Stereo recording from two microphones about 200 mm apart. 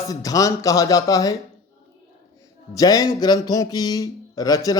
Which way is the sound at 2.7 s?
20° left (ahead or behind).